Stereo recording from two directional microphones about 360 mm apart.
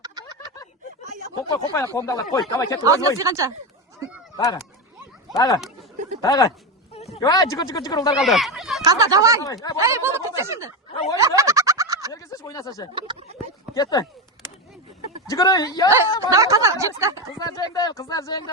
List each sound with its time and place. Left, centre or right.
1.5 s speech: centre
2.8 s speech: centre
5.3 s speech: centre
8.1 s speech: centre
9.4 s speech: centre
9.7 s speech: centre
10.9 s a sound: centre
11.3 s a sound: centre
12.1 s a sound: centre
12.9 s speech: centre
13.7 s speech: centre
15.3 s speech: centre
16.3 s speech: centre
17.3 s speech: centre